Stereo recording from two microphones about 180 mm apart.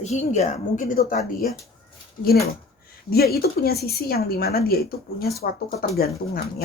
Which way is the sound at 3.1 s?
60° left (ahead or behind).